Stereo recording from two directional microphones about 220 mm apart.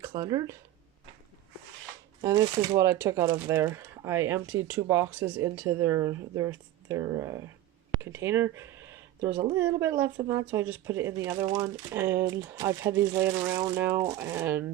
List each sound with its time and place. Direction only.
0.0 s speech: 20° right (ahead or behind)
2.2 s speech: 15° right (ahead or behind)
9.3 s a woman's voice: 25° right (ahead or behind)
9.6 s speech: 10° right (ahead or behind)